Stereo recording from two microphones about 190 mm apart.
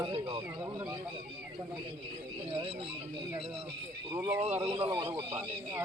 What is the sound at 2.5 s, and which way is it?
Speech, 25° right (ahead or behind).